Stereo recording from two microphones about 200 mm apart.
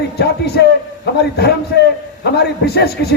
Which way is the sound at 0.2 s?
55° left (ahead or behind).